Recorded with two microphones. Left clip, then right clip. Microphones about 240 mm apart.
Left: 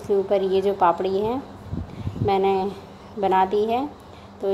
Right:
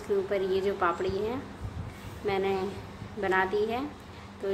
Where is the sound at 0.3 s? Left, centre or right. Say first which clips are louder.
Left 8 dB; centre.